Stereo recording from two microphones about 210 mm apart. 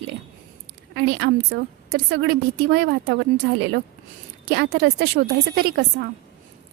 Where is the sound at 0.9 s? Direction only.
50° right (ahead or behind).